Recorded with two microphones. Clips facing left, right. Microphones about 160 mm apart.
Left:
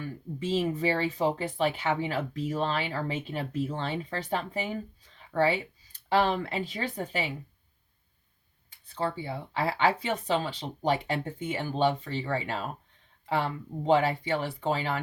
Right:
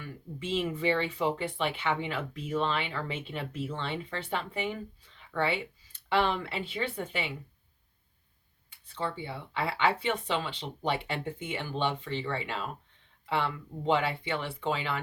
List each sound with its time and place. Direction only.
0.0 s speech: 40° left (ahead or behind)
9.0 s speech: 40° left (ahead or behind)